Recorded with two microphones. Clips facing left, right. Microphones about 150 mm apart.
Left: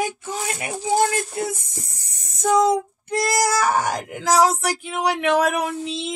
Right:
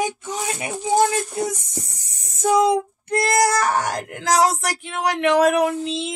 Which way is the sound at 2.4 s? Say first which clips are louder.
Even; 10° right (ahead or behind).